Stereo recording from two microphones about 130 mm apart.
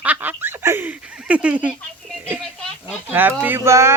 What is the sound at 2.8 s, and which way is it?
Speech, 15° right (ahead or behind).